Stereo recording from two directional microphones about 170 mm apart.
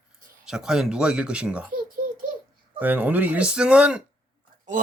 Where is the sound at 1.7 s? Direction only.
55° right (ahead or behind).